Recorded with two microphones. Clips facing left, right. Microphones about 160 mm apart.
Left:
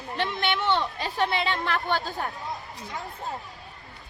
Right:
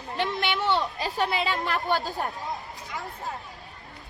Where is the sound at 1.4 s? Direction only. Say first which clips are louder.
Even; 40° right (ahead or behind).